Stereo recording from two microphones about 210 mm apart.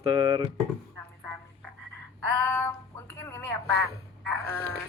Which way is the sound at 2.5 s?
10° left (ahead or behind).